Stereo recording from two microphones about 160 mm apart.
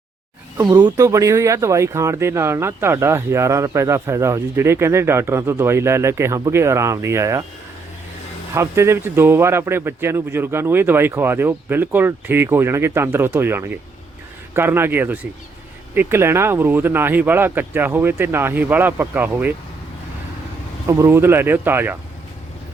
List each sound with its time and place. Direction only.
0.5 s speech: 20° right (ahead or behind)
8.5 s speech: 15° right (ahead or behind)
20.8 s speech: 15° right (ahead or behind)